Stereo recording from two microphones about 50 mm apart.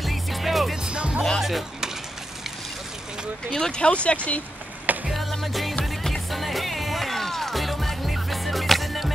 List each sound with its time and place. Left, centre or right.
0.0 s music: centre
0.8 s music: right
1.4 s music: centre
3.5 s speech: centre
4.9 s a sound: right
5.4 s music: centre